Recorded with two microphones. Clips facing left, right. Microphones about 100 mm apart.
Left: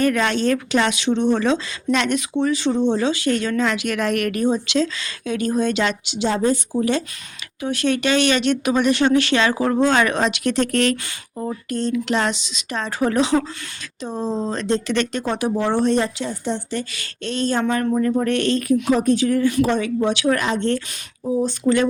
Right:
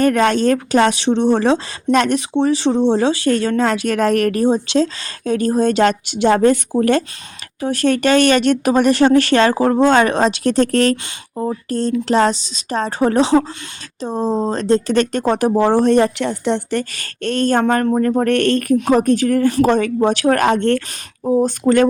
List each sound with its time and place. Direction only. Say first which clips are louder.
0.0 s speech: right 5 dB; 45° right (ahead or behind)
7.6 s speech: right 4 dB; 40° right (ahead or behind)
15.9 s a woman's voice: right 6 dB; 55° right (ahead or behind)
16.9 s a woman's voice: right 6 dB; 50° right (ahead or behind)